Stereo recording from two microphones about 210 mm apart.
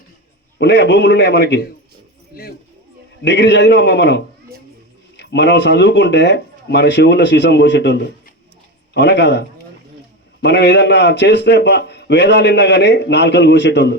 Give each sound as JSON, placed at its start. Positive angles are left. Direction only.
{"t": 0.6, "sound": "a man's voice", "side_deg": 55}
{"t": 10.4, "sound": "a man's voice", "side_deg": 55}